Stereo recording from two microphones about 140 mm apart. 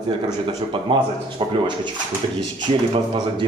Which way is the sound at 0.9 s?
35° right (ahead or behind).